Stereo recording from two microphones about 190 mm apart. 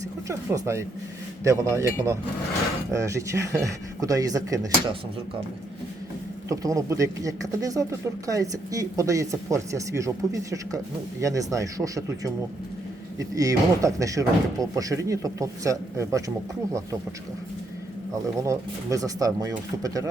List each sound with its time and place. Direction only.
0.3 s speech: 15° right (ahead or behind)
6.5 s speech: 15° right (ahead or behind)
11.2 s speech: 15° right (ahead or behind)
18.1 s speech: 15° right (ahead or behind)